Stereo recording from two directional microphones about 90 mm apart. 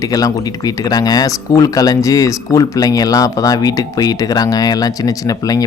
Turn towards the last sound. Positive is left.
turn(degrees=40)  # may be behind; listen again after turning